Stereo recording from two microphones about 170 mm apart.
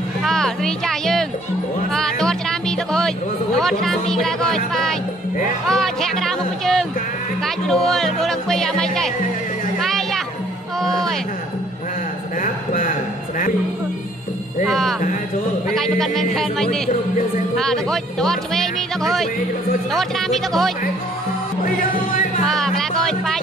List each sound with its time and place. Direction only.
0.2 s a sound: 5° left (ahead or behind)
1.9 s music: 5° left (ahead or behind)
3.5 s speech: centre (ahead or behind)
5.7 s music: centre (ahead or behind)
7.4 s speech: centre (ahead or behind)
9.8 s music: centre (ahead or behind)
10.8 s a sound: centre (ahead or behind)
12.4 s a sound: 55° left (ahead or behind)
14.7 s speech: centre (ahead or behind)
22.5 s music: centre (ahead or behind)